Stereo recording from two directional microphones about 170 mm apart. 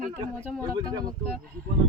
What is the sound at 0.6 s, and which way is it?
Speech, 20° right (ahead or behind).